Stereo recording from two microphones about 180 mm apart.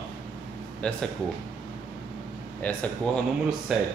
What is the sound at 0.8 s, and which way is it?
Speech, 5° left (ahead or behind).